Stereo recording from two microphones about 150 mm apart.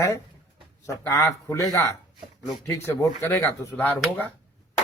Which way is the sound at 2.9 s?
15° left (ahead or behind).